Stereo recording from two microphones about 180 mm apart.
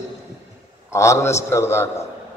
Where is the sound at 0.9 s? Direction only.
15° left (ahead or behind).